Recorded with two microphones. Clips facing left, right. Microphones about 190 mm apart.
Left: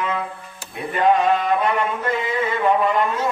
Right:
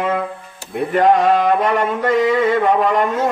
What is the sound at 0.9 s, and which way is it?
Mantra, 85° right.